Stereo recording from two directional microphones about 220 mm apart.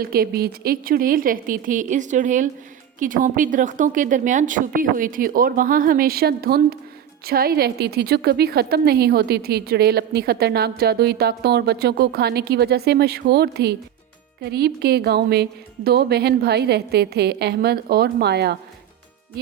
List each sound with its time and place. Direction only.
0.0 s a woman's voice: 45° right (ahead or behind)